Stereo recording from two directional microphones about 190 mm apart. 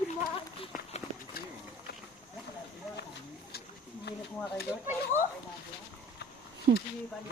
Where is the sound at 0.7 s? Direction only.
45° left (ahead or behind).